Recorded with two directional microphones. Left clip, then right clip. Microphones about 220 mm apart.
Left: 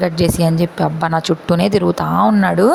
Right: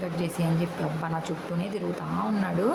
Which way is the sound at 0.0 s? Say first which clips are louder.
Left 15 dB; 40° left (ahead or behind).